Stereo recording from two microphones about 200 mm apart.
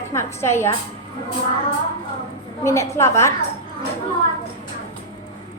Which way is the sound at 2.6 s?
15° left (ahead or behind).